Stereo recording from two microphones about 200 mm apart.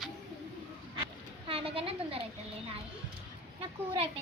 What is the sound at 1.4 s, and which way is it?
Speech, 30° right (ahead or behind).